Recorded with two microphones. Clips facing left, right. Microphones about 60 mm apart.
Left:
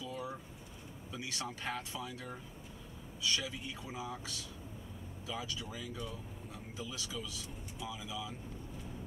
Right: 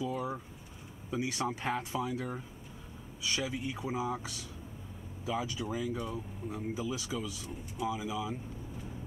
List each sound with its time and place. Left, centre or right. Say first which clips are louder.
0.0 s vehicle: right 7 dB; right
1.1 s speech: right 9 dB; right